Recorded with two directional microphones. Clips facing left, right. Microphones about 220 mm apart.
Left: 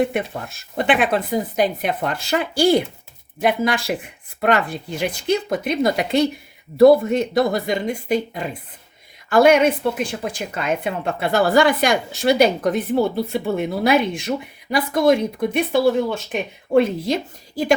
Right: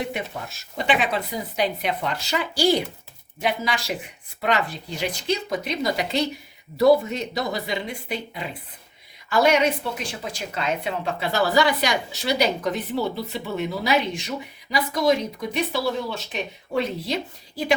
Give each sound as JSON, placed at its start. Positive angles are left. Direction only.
{"t": 0.0, "sound": "a woman's voice", "side_deg": 55}